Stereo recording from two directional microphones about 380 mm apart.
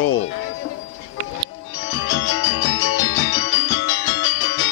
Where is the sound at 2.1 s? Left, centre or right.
Left.